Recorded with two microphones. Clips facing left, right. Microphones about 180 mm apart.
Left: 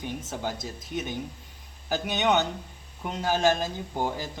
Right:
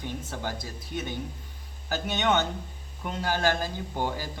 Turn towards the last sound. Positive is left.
turn(degrees=20)  # may be behind; listen again after turning